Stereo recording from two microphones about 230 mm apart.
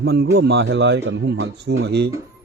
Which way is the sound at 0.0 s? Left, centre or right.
Right.